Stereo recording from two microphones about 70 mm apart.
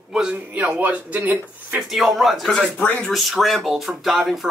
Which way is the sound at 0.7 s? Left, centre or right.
Right.